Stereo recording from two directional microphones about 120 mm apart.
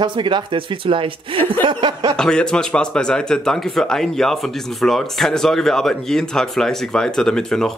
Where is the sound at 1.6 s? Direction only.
40° right (ahead or behind).